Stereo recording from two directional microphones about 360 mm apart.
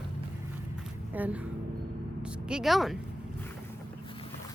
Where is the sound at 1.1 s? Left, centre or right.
Centre.